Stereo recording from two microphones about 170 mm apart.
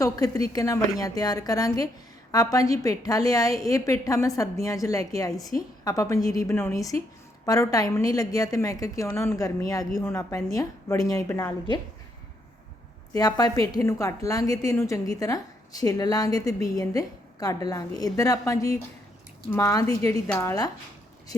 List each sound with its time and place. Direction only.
0.0 s a woman's voice: 20° left (ahead or behind)
13.1 s a woman's voice: 20° left (ahead or behind)